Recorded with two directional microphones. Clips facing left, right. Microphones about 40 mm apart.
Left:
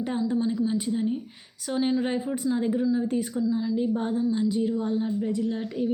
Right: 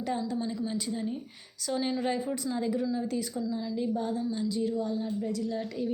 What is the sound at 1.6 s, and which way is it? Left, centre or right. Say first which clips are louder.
A woman's voice: left 4 dB; left.